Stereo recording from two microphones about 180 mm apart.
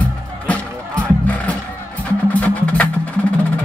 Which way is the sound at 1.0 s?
10° left (ahead or behind).